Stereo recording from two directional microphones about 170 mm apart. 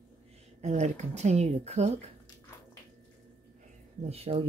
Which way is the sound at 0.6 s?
45° right (ahead or behind).